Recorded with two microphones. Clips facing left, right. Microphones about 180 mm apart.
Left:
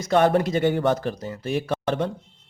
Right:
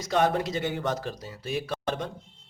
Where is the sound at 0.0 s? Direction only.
60° left (ahead or behind).